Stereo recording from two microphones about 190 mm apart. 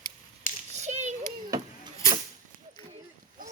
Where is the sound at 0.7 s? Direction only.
35° right (ahead or behind).